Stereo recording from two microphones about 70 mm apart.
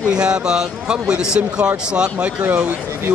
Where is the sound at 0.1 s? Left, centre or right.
Centre.